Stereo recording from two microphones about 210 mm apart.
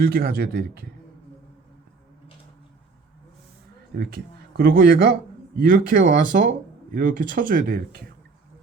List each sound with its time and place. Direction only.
0.0 s speech: 45° right (ahead or behind)
3.9 s speech: 45° right (ahead or behind)